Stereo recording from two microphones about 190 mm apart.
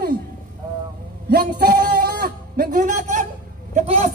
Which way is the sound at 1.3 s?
55° right (ahead or behind).